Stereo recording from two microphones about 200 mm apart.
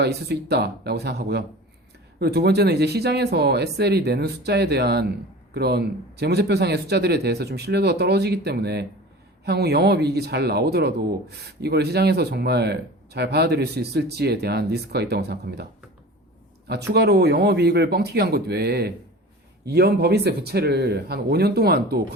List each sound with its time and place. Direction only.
0.0 s speech: 55° right (ahead or behind)
16.9 s speech: 55° right (ahead or behind)